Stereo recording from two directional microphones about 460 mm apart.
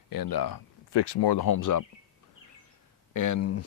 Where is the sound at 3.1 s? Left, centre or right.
Left.